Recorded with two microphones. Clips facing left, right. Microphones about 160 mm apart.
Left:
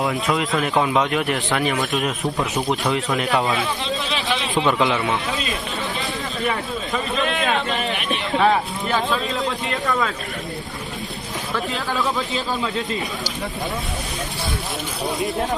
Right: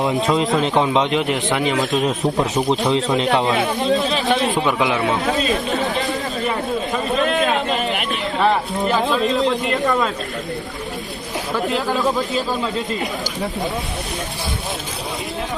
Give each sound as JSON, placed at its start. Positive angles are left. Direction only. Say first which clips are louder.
{"t": 0.0, "sound": "a man's voice", "louder": "right 4 dB", "side_deg": -25}
{"t": 3.6, "sound": "speech", "louder": "right 7 dB", "side_deg": -50}
{"t": 4.6, "sound": "a man's voice", "louder": "even", "side_deg": -15}
{"t": 7.3, "sound": "a sound", "louder": "right 3 dB", "side_deg": -45}
{"t": 9.1, "sound": "speech", "louder": "right 6 dB", "side_deg": 0}
{"t": 11.9, "sound": "a man's voice", "louder": "right 2 dB", "side_deg": -15}